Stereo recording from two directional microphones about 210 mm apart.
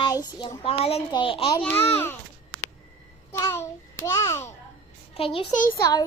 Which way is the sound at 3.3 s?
15° left (ahead or behind).